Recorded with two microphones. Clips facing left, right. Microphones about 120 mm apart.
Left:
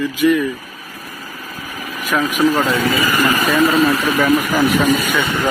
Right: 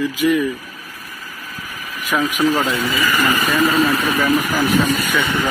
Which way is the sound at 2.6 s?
50° left (ahead or behind).